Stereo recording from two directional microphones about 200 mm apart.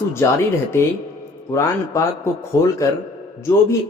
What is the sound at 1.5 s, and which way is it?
A man's voice, 15° left (ahead or behind).